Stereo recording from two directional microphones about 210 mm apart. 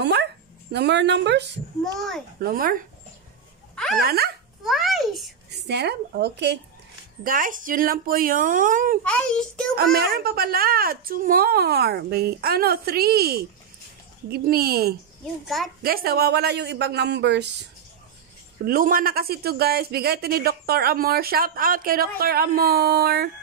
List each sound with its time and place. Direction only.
0.0 s dog: 55° right (ahead or behind)
1.8 s a child's voice: centre (ahead or behind)
2.4 s speech: 45° right (ahead or behind)
3.7 s a sound: centre (ahead or behind)
4.0 s speech: 45° right (ahead or behind)
4.6 s a child's voice: centre (ahead or behind)
5.7 s speech: 50° right (ahead or behind)
7.2 s speech: 40° right (ahead or behind)
9.0 s a child's voice: 5° left (ahead or behind)
9.9 s speech: 45° right (ahead or behind)
15.4 s a child's voice: centre (ahead or behind)
15.8 s speech: 45° right (ahead or behind)
18.7 s speech: 45° right (ahead or behind)